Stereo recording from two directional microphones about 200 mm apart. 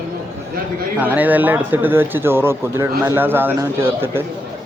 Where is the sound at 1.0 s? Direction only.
10° right (ahead or behind).